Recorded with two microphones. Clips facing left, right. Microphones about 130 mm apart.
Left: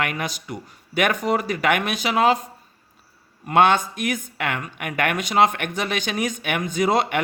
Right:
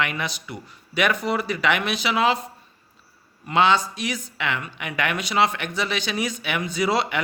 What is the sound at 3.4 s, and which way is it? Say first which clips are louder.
Speech: left 2 dB; 50° left (ahead or behind).